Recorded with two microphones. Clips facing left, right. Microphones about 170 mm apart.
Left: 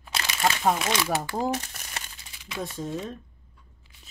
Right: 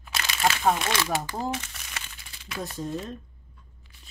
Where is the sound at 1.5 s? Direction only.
45° left (ahead or behind).